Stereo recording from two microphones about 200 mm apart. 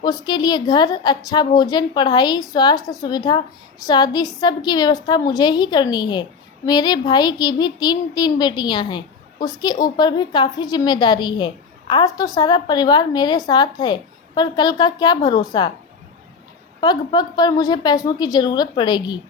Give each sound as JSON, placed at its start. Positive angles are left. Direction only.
{"t": 0.0, "sound": "a woman's voice", "side_deg": 20}
{"t": 16.8, "sound": "a woman's voice", "side_deg": 20}